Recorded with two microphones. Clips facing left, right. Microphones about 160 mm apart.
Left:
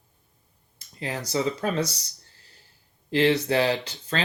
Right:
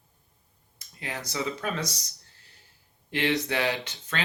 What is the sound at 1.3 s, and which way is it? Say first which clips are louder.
Speech: left 6 dB; 30° left (ahead or behind).